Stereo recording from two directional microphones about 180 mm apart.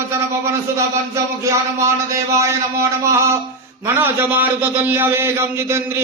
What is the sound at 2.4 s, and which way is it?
A man's voice, 15° right (ahead or behind).